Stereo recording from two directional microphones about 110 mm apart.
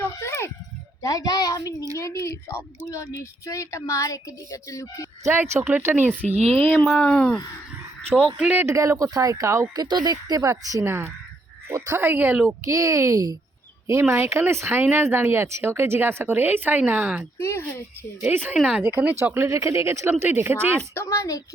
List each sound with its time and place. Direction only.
0.0 s a sound: 25° left (ahead or behind)
1.0 s a child's voice: 35° left (ahead or behind)
5.2 s speech: 20° right (ahead or behind)
6.2 s speech: 80° right
6.8 s speech: 10° left (ahead or behind)
8.4 s speech: 15° right (ahead or behind)
8.6 s speech: 25° right (ahead or behind)
9.7 s speech: 40° right (ahead or behind); by 12.5 s 15° right (ahead or behind)
12.6 s speech: 30° right (ahead or behind)
13.8 s speech: 20° right (ahead or behind)
17.3 s speech: 20° left (ahead or behind)
18.2 s speech: 15° right (ahead or behind)
18.5 s speech: 5° right (ahead or behind)
20.9 s speech: 25° left (ahead or behind)